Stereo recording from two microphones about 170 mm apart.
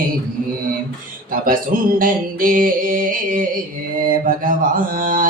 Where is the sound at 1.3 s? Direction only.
55° right (ahead or behind).